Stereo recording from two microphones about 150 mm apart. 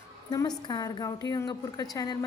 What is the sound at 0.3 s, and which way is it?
A woman's voice, 25° left (ahead or behind).